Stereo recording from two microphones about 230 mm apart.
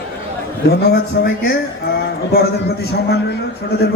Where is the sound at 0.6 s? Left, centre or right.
Left.